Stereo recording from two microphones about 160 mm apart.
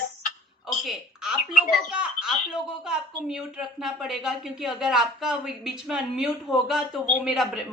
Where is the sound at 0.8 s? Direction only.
5° right (ahead or behind).